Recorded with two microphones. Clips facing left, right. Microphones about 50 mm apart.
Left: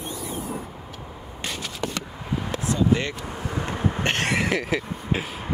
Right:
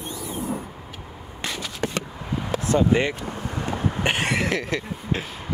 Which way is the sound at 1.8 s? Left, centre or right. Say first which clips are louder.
Right 3 dB; right.